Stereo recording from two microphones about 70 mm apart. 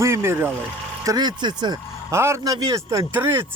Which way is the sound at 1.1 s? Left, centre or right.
Right.